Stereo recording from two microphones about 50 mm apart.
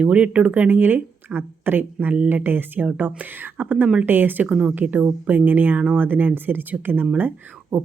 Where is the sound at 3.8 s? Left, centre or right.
Right.